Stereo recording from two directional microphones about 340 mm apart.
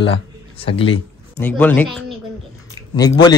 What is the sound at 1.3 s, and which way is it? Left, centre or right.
A man's voice, centre.